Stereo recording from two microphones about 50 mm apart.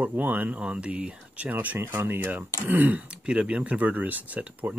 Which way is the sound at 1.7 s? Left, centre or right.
Right.